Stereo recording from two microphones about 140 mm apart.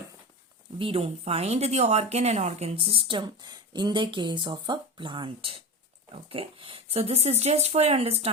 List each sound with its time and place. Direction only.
0.8 s speech: 45° right (ahead or behind)